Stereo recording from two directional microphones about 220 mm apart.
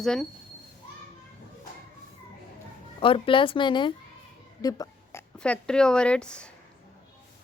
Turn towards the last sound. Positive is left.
turn(degrees=5)  # may be behind; listen again after turning